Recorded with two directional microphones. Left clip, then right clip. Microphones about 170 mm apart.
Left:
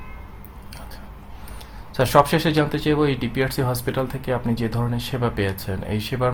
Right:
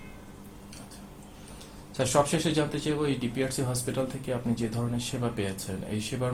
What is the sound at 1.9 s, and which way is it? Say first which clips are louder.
Speech: left 9 dB; 55° left (ahead or behind).